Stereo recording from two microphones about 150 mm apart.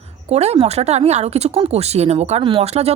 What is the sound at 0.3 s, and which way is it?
Speech, 45° right (ahead or behind).